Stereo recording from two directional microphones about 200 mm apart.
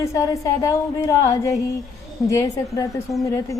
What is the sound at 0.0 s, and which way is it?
Speech, 15° left (ahead or behind).